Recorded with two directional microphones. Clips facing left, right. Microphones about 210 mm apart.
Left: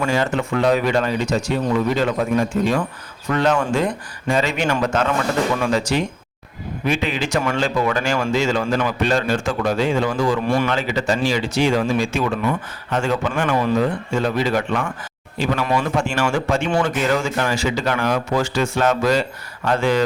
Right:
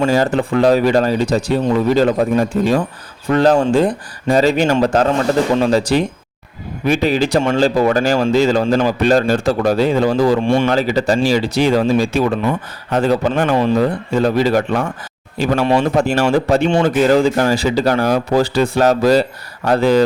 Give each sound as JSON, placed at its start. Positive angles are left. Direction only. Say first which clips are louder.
{"t": 0.0, "sound": "speech", "louder": "right 5 dB", "side_deg": -35}
{"t": 10.7, "sound": "speech", "louder": "right 6 dB", "side_deg": -35}
{"t": 15.6, "sound": "speech", "louder": "right 8 dB", "side_deg": -30}